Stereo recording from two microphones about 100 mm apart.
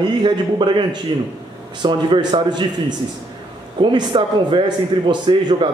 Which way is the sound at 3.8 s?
50° right (ahead or behind).